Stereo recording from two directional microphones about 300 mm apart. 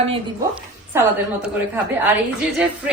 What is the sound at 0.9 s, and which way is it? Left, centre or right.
Speech, centre.